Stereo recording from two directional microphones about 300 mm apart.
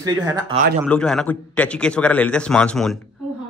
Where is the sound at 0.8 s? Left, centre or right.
Centre.